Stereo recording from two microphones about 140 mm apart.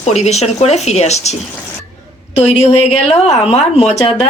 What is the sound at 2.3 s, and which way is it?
Speech, 50° left (ahead or behind).